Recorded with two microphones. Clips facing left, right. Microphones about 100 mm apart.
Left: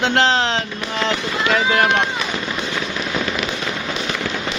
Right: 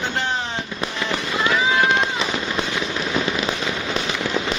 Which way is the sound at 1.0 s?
90° left.